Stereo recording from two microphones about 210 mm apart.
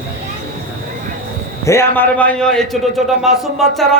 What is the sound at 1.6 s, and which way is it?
A man's voice, 10° left (ahead or behind).